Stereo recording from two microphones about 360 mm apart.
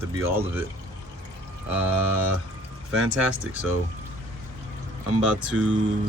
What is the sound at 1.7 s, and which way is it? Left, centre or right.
Speech, centre.